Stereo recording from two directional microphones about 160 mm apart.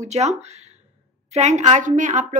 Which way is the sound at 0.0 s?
45° right (ahead or behind).